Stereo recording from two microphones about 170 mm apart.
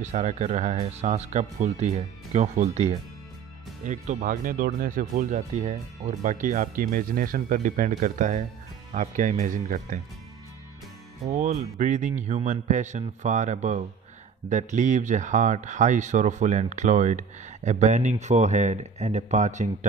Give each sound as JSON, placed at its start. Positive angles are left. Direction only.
{"t": 0.0, "sound": "speech", "side_deg": -40}
{"t": 11.2, "sound": "speech", "side_deg": -45}